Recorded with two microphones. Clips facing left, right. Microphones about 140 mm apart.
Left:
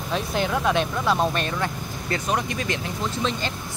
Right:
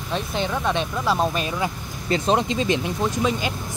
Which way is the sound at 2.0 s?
20° right (ahead or behind).